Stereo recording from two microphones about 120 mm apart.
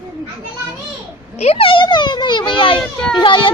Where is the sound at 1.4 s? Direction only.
55° left (ahead or behind).